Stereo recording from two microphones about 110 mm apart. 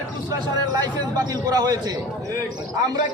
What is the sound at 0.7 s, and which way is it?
Speech, 35° right (ahead or behind).